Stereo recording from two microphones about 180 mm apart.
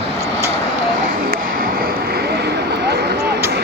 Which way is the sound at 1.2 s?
50° right (ahead or behind).